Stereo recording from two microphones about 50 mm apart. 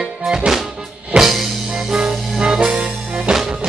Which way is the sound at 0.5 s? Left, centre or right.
Centre.